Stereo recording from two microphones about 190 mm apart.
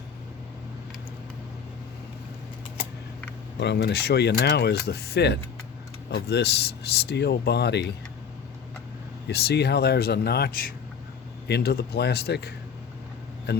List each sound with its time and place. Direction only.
3.6 s speech: 60° left (ahead or behind)
9.3 s speech: 60° left (ahead or behind)